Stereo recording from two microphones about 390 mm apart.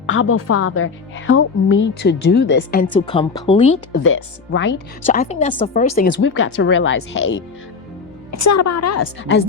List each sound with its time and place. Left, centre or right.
0.1 s a woman's voice: left
2.8 s speech: centre
4.0 s speech: left
8.4 s a woman's voice: left